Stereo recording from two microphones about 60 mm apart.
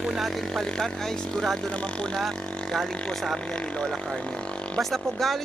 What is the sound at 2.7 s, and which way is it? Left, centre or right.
Speech, centre.